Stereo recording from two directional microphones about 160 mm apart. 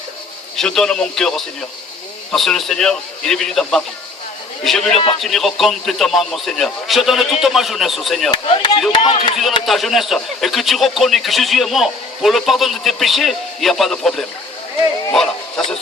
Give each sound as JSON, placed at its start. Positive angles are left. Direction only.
{"t": 0.5, "sound": "a man's voice", "side_deg": 5}
{"t": 2.3, "sound": "a man's voice", "side_deg": 0}
{"t": 8.3, "sound": "speech", "side_deg": 30}
{"t": 9.6, "sound": "a man's voice", "side_deg": 0}
{"t": 15.1, "sound": "dog", "side_deg": 5}